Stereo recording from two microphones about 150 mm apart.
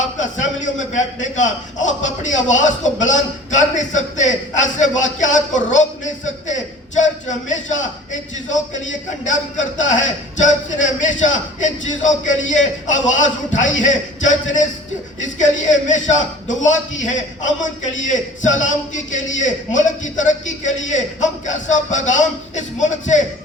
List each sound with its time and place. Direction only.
0.0 s a man's voice: 55° left (ahead or behind)